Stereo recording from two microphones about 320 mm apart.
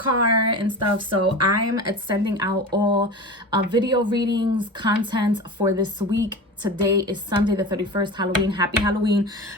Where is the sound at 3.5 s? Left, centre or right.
Centre.